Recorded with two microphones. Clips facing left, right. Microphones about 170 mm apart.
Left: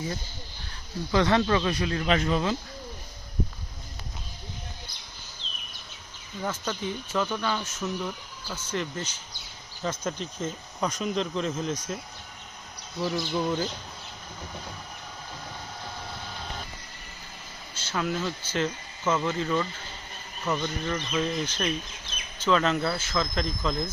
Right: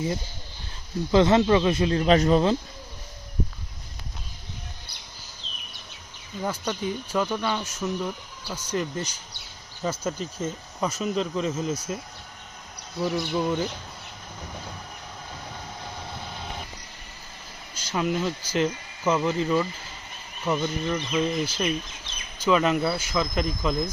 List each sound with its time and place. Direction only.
1.1 s speech: 20° right (ahead or behind)
6.4 s speech: 10° right (ahead or behind)
13.0 s speech: centre (ahead or behind)
17.7 s speech: 10° right (ahead or behind)